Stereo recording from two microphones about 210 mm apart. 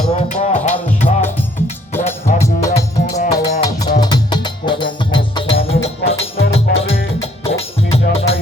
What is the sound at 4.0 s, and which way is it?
Music, 20° left (ahead or behind).